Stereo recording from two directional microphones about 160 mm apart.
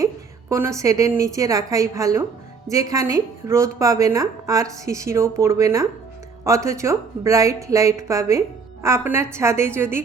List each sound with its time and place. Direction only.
0.0 s a woman's voice: 15° right (ahead or behind)